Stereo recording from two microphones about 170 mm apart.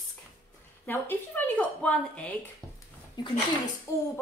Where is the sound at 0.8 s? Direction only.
10° left (ahead or behind).